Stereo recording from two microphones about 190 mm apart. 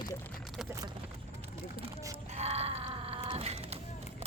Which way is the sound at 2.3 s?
35° right (ahead or behind).